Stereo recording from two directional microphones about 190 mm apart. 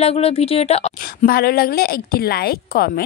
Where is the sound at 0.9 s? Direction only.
50° left (ahead or behind).